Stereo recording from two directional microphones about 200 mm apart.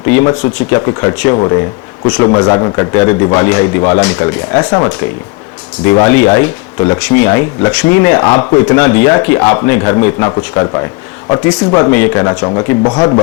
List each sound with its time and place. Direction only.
0.1 s speech: 15° left (ahead or behind)